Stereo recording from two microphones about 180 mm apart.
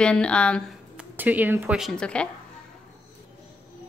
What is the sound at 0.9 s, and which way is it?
Speech, 10° right (ahead or behind).